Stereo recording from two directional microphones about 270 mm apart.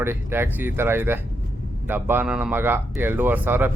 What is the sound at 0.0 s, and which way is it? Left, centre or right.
Speech, centre.